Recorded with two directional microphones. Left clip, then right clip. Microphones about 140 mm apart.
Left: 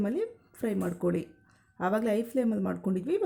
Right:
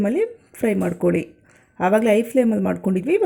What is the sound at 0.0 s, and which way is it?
Speech, 15° right (ahead or behind).